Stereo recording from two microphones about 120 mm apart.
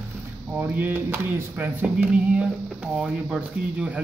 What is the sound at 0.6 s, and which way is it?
Speech, 15° right (ahead or behind).